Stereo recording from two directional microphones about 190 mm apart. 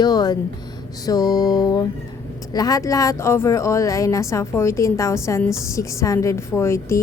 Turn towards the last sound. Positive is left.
turn(degrees=15)  # may be behind; listen again after turning